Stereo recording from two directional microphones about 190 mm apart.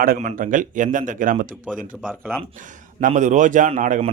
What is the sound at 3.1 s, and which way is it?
Speech, 40° right (ahead or behind).